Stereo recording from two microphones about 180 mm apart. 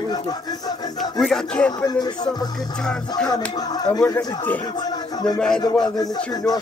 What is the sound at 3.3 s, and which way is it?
Speech, 20° left (ahead or behind).